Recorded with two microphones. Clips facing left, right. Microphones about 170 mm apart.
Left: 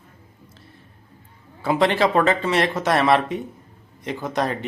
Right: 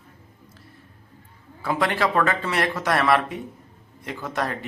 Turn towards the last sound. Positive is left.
turn(degrees=20)  # may be behind; listen again after turning